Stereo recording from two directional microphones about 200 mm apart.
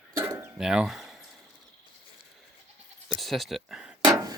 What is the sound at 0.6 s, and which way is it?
Speech, 5° right (ahead or behind).